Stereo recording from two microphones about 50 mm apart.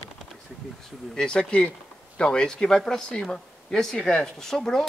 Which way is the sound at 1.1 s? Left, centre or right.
Centre.